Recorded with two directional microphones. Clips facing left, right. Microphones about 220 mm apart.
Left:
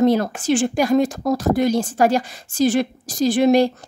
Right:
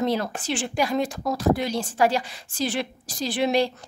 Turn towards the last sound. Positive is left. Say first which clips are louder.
# left 8 dB
turn(degrees=45)  # may be behind; listen again after turning